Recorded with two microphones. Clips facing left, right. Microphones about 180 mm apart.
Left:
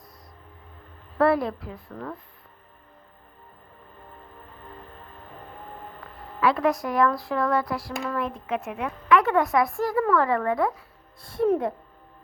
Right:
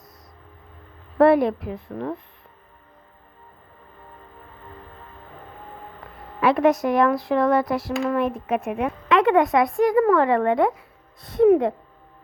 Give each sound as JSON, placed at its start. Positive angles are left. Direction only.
{"t": 1.2, "sound": "speech", "side_deg": -20}
{"t": 6.4, "sound": "speech", "side_deg": -20}